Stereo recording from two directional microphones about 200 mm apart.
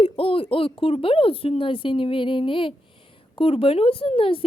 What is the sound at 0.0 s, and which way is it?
Speech, 25° left (ahead or behind).